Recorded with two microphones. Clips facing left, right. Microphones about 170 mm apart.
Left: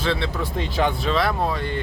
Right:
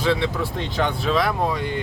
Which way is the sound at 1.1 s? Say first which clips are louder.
Right 1 dB; 10° right (ahead or behind).